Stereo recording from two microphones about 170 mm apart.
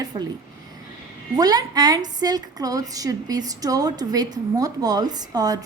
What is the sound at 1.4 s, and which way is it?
A woman's voice, 20° right (ahead or behind).